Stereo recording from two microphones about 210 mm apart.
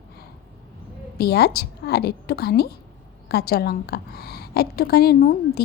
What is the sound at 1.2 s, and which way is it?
A woman's voice, 50° left (ahead or behind).